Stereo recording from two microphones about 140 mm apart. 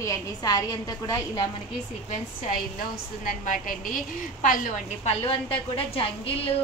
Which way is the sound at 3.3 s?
75° left (ahead or behind).